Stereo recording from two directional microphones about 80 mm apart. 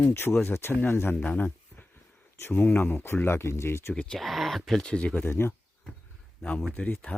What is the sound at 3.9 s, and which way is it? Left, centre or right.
Speech, centre.